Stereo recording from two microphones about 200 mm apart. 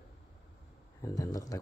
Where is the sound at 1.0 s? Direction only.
20° left (ahead or behind).